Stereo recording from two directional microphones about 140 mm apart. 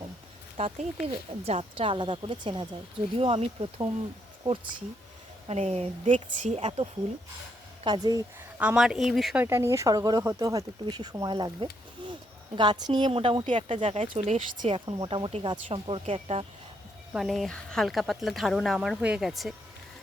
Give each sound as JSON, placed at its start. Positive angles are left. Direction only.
{"t": 0.5, "sound": "a woman's voice", "side_deg": -50}
{"t": 5.5, "sound": "a woman's voice", "side_deg": -50}
{"t": 7.9, "sound": "speech", "side_deg": -30}
{"t": 8.5, "sound": "speech", "side_deg": -10}
{"t": 9.4, "sound": "speech", "side_deg": -20}
{"t": 12.0, "sound": "a sound", "side_deg": -35}
{"t": 12.5, "sound": "a woman's voice", "side_deg": -30}
{"t": 14.7, "sound": "a woman's voice", "side_deg": -40}
{"t": 17.1, "sound": "speech", "side_deg": 0}